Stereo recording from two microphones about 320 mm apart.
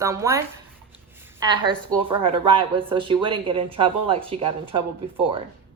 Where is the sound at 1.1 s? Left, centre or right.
Centre.